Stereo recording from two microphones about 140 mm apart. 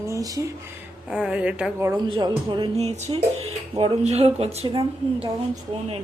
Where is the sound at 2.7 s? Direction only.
50° right (ahead or behind).